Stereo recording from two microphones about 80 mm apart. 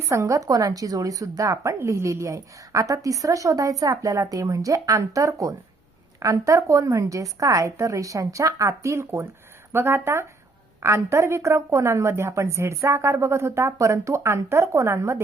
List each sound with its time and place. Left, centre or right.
0.1 s a woman's voice: right